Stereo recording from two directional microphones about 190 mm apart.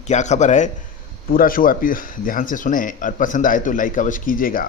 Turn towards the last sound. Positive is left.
turn(degrees=45)  # may be behind; listen again after turning